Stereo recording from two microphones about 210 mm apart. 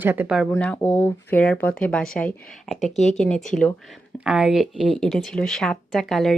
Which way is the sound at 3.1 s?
5° left (ahead or behind).